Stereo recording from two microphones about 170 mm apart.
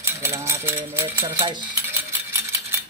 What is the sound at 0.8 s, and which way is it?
Typewriter, 15° right (ahead or behind).